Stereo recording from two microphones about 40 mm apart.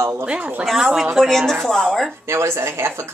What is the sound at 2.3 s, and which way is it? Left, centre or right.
Speech, right.